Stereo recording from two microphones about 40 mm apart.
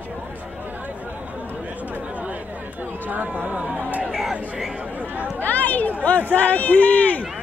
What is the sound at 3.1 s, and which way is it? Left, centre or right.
Speech, right.